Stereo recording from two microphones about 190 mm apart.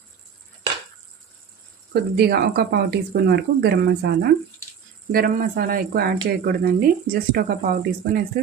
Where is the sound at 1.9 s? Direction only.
55° right (ahead or behind).